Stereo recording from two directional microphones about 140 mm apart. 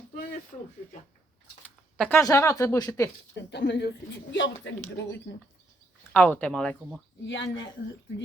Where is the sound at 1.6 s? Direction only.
10° left (ahead or behind).